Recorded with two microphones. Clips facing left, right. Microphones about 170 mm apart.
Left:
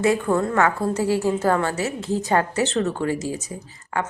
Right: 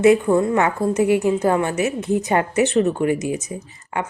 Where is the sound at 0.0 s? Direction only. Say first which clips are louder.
Right 5 dB; 20° right (ahead or behind).